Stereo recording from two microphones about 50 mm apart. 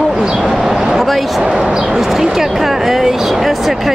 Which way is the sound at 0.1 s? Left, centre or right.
Centre.